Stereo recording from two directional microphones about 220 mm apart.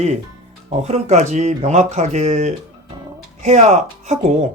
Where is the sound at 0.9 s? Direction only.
30° right (ahead or behind).